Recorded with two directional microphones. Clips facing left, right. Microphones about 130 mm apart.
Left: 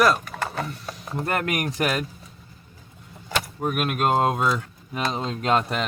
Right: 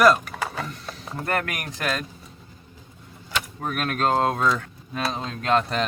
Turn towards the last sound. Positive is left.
turn(degrees=20)  # may be behind; listen again after turning